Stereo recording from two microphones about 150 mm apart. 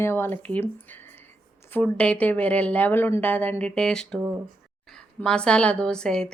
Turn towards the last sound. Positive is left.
turn(degrees=5)  # may be behind; listen again after turning